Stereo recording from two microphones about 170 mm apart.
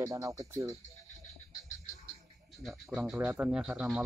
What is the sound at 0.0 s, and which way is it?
Speech, 20° right (ahead or behind).